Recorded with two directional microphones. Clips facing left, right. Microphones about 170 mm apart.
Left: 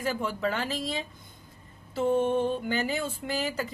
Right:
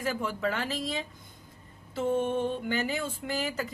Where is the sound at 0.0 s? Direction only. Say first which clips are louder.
Left 1 dB; 30° left (ahead or behind).